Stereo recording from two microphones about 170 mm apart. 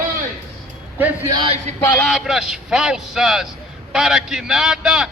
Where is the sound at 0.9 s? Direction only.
10° right (ahead or behind).